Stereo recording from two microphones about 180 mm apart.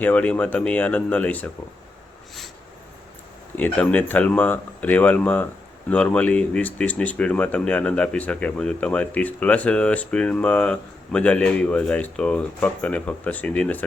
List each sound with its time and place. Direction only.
0.0 s speech: 10° left (ahead or behind)
3.5 s speech: 10° left (ahead or behind)